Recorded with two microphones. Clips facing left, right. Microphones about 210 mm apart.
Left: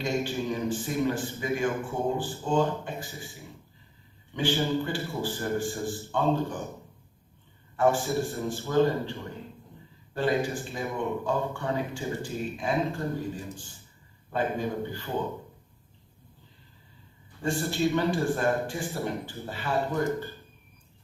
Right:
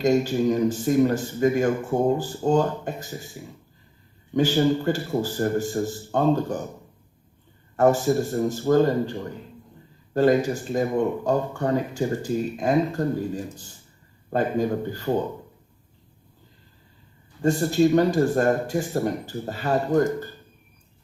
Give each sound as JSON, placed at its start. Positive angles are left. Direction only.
{"t": 0.0, "sound": "speech", "side_deg": -40}
{"t": 4.4, "sound": "speech", "side_deg": -40}
{"t": 7.8, "sound": "speech", "side_deg": -40}
{"t": 10.2, "sound": "speech", "side_deg": -40}
{"t": 17.4, "sound": "speech", "side_deg": -40}